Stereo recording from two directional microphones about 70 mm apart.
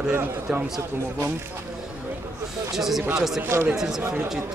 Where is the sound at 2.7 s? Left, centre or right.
Centre.